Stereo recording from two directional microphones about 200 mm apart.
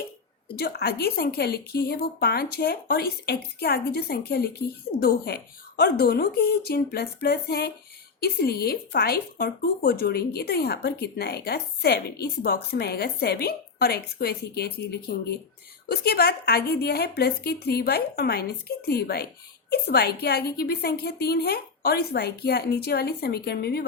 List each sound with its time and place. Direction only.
0.5 s speech: 50° left (ahead or behind)